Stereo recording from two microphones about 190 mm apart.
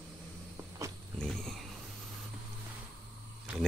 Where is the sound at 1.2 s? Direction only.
5° left (ahead or behind).